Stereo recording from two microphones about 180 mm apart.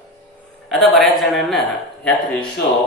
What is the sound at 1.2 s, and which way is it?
Speech, centre (ahead or behind).